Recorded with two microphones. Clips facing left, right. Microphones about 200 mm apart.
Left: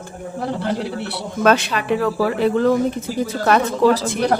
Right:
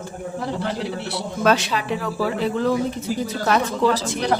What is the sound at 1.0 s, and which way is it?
A woman's voice, 60° left (ahead or behind).